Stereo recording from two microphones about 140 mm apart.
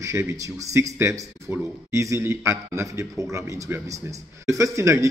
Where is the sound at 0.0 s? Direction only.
20° right (ahead or behind).